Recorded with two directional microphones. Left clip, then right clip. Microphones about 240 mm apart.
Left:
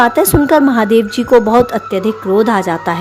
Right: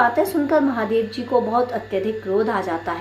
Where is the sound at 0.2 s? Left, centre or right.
Left.